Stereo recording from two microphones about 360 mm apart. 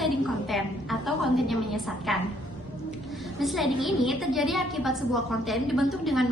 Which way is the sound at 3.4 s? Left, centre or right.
Centre.